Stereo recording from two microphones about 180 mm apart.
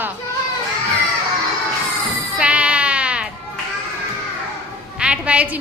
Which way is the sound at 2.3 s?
5° right (ahead or behind).